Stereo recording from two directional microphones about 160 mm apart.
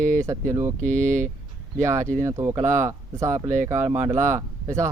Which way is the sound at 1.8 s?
15° right (ahead or behind).